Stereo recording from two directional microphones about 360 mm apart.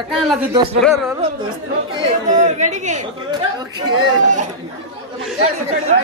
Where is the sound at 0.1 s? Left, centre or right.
Centre.